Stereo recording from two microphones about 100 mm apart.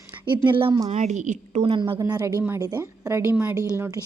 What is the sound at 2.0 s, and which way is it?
A woman's voice, 35° right (ahead or behind).